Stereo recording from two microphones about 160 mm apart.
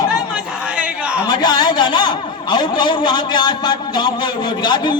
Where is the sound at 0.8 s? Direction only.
5° right (ahead or behind).